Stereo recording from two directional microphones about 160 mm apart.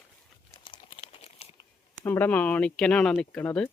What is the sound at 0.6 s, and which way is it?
Crumpling, 30° left (ahead or behind).